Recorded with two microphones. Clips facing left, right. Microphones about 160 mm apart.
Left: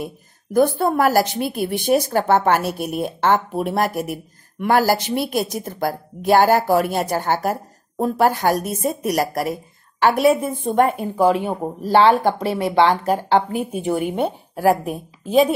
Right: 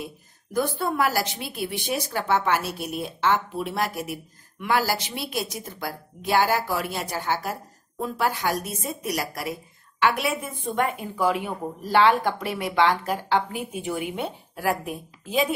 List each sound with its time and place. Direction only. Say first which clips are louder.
0.0 s a woman's voice: left 6 dB; 50° left (ahead or behind)